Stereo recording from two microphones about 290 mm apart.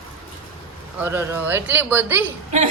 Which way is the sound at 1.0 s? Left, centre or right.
Centre.